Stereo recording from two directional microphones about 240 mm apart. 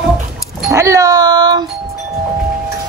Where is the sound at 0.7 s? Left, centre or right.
Centre.